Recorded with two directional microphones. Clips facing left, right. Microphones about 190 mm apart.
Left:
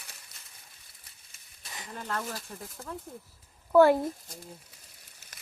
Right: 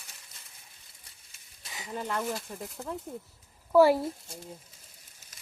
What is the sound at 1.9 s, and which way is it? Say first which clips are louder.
Speech: right 4 dB; 15° right (ahead or behind).